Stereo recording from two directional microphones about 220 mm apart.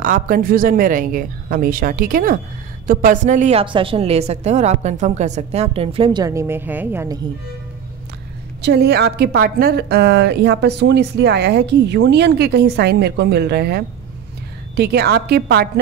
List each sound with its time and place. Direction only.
0.0 s a woman's voice: 40° right (ahead or behind); by 7.2 s 10° right (ahead or behind)
8.6 s a woman's voice: 50° right (ahead or behind)